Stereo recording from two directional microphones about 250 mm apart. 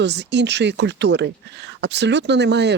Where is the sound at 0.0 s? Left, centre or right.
Right.